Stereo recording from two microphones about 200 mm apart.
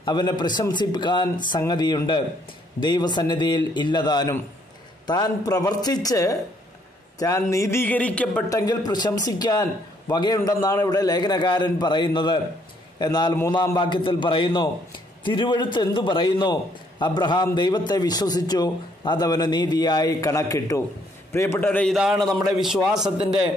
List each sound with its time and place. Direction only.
0.0 s a man's voice: 20° left (ahead or behind)
8.5 s a man's voice: 20° left (ahead or behind); by 23.1 s centre (ahead or behind)